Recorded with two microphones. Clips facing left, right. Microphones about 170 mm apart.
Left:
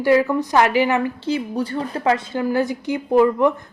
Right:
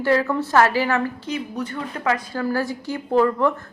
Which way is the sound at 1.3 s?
30° left (ahead or behind).